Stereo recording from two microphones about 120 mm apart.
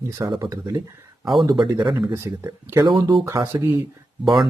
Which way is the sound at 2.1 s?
20° right (ahead or behind).